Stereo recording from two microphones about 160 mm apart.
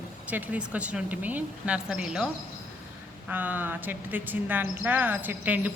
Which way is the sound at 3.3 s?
10° right (ahead or behind).